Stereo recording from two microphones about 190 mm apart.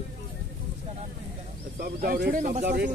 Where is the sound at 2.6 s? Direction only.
60° right (ahead or behind).